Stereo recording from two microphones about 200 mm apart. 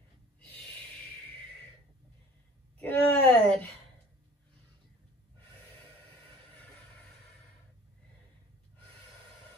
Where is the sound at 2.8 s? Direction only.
5° left (ahead or behind).